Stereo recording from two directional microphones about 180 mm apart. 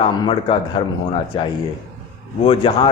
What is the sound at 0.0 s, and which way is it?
Speech, 25° left (ahead or behind).